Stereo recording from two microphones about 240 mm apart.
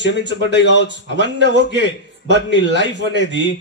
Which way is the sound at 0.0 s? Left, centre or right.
Left.